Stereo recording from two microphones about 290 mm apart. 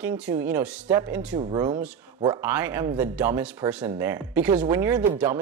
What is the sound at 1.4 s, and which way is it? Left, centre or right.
Speech, centre.